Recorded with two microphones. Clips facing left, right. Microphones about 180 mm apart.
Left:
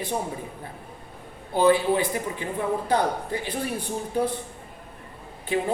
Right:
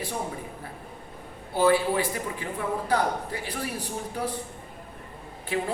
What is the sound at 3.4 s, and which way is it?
Speech, 25° left (ahead or behind).